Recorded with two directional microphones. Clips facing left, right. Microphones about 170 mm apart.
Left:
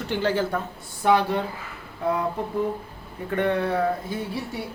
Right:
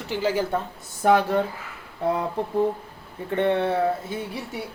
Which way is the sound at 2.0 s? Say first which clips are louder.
Right 1 dB; 30° right (ahead or behind).